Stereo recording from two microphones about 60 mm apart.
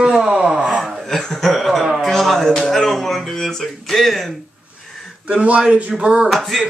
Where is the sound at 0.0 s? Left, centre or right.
Centre.